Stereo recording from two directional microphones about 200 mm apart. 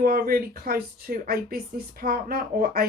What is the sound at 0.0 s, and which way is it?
Speech, 45° right (ahead or behind).